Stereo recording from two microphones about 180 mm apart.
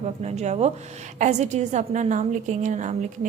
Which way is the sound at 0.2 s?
40° right (ahead or behind).